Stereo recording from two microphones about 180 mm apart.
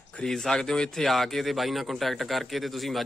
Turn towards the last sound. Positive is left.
turn(degrees=0)  # may be behind; listen again after turning